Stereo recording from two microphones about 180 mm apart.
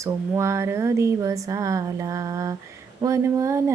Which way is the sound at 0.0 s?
15° right (ahead or behind).